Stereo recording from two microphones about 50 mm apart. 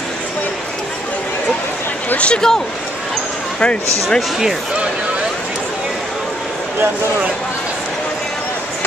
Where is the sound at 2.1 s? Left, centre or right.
Left.